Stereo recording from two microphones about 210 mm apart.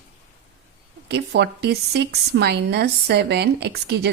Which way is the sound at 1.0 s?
55° right (ahead or behind).